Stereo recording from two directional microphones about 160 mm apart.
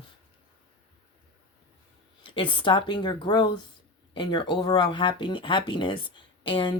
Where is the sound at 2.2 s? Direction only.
30° left (ahead or behind).